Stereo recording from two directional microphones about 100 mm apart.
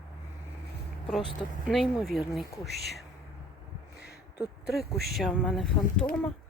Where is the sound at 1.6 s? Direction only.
5° right (ahead or behind).